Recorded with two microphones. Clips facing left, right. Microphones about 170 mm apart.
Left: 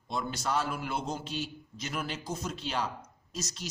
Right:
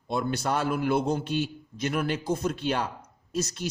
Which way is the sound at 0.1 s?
60° right (ahead or behind).